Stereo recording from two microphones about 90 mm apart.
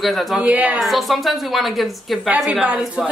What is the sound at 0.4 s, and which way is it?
Speech, 15° right (ahead or behind).